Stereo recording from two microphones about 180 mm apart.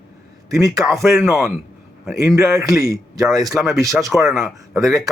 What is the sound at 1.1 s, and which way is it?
Speech, centre (ahead or behind).